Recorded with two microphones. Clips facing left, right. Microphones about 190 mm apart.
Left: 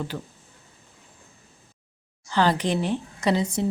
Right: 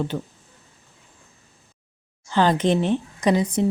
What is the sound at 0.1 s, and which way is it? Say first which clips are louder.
Speech: right 5 dB; 10° right (ahead or behind).